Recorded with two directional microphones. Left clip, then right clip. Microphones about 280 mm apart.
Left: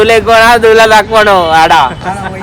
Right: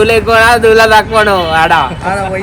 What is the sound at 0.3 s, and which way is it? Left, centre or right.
Speech, centre.